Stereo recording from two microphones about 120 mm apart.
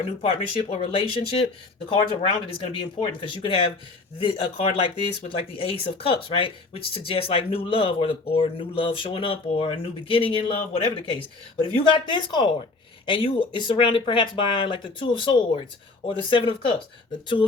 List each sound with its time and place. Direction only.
0.2 s speech: 50° left (ahead or behind)